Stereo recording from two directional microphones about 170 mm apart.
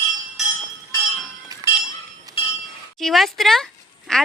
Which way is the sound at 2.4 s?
30° left (ahead or behind).